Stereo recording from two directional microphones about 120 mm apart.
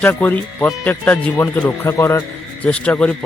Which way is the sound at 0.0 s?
15° left (ahead or behind).